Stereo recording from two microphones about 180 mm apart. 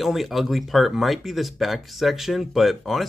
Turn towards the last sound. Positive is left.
turn(degrees=0)  # may be behind; listen again after turning